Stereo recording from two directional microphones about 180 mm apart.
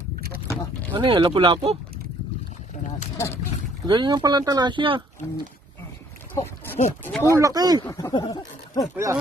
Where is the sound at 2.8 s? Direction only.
45° left (ahead or behind).